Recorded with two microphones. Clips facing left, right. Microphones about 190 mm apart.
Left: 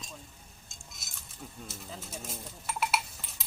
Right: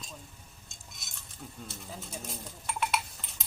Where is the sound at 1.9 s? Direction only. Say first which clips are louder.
Right 1 dB; centre (ahead or behind).